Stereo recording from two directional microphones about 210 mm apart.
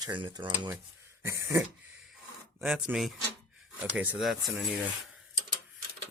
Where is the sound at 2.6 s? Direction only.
Centre (ahead or behind).